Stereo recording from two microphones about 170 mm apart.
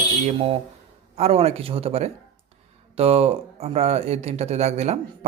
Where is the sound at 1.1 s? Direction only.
35° right (ahead or behind).